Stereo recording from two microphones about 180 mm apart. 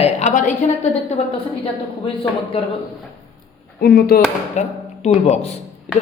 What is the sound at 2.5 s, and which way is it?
Speech, 30° left (ahead or behind).